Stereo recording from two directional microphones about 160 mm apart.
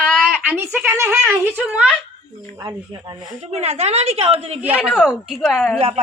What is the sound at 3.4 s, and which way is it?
A woman's voice, 40° right (ahead or behind).